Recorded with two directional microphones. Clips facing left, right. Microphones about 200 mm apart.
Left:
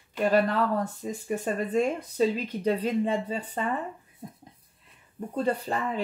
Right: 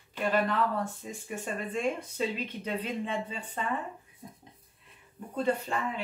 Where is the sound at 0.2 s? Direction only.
40° left (ahead or behind).